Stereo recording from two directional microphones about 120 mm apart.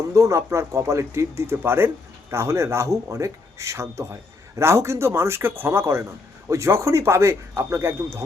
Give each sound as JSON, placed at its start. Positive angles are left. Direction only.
{"t": 0.1, "sound": "a man's voice", "side_deg": -25}